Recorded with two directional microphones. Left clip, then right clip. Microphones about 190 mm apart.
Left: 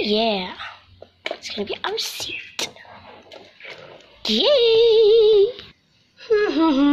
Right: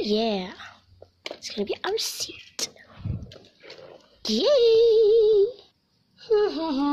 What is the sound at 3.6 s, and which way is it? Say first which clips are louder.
Speech: left 6 dB; 25° right (ahead or behind).